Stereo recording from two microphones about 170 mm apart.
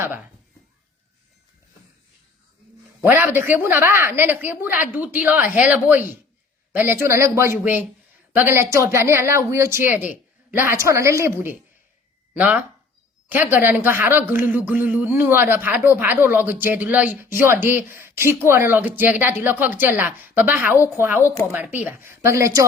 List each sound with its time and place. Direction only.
3.0 s speech: 10° right (ahead or behind)